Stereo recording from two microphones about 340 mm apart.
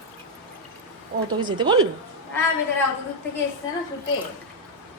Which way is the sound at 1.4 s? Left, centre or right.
Centre.